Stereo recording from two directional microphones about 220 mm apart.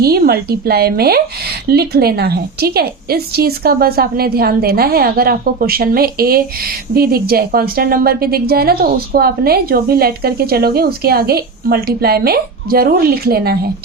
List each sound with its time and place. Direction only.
0.0 s a woman's voice: 45° right (ahead or behind)